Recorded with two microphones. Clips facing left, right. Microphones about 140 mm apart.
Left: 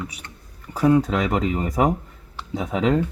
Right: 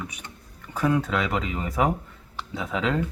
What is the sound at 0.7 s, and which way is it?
Speech, 35° left (ahead or behind).